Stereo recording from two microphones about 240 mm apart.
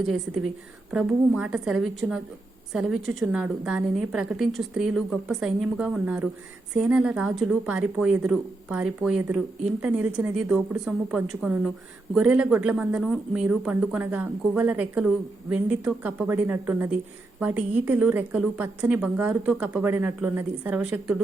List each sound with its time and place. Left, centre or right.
0.3 s a woman's voice: right
0.9 s a woman's voice: centre